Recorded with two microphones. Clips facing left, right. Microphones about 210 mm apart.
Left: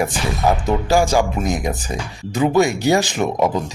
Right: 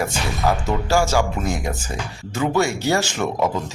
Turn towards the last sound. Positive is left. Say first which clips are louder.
# left 3 dB
turn(degrees=15)  # may be behind; listen again after turning